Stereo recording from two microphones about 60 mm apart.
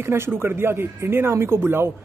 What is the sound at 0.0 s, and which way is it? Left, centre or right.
Speech, right.